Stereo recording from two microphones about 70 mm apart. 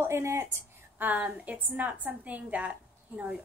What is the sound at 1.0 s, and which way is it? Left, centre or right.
A woman's voice, right.